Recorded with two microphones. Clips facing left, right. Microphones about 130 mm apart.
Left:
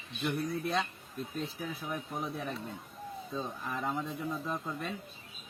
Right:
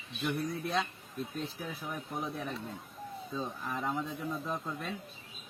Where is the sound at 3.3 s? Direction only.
Centre (ahead or behind).